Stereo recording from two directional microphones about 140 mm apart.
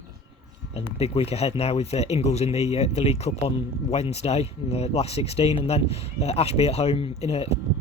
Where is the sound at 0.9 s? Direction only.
45° left (ahead or behind).